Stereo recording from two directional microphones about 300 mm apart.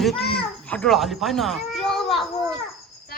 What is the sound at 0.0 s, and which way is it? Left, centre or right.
A child's voice, centre.